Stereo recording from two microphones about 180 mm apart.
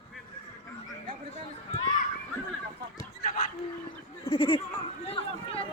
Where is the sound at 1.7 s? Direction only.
25° left (ahead or behind).